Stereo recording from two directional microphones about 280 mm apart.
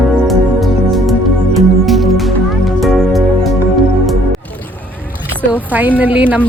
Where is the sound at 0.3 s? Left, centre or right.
Centre.